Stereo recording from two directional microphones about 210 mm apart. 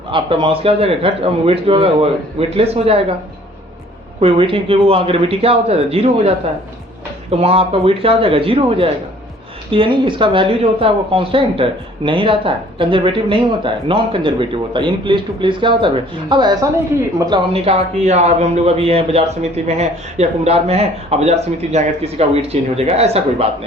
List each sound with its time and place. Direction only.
0.1 s a man's voice: 25° right (ahead or behind)
4.2 s a man's voice: 25° right (ahead or behind)